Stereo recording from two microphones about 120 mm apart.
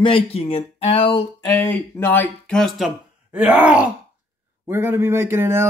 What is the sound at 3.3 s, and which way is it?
Groan, 10° right (ahead or behind).